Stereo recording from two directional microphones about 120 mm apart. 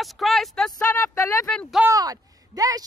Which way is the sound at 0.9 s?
25° left (ahead or behind).